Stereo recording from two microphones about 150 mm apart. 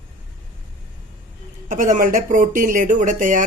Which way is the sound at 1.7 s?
65° right (ahead or behind).